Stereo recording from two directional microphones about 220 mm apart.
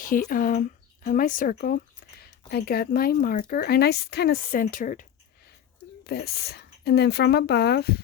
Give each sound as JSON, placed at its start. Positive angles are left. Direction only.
{"t": 0.0, "sound": "speech", "side_deg": 40}
{"t": 6.1, "sound": "speech", "side_deg": 45}